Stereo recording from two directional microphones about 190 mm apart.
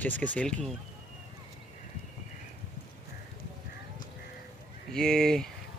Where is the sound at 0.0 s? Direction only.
10° left (ahead or behind).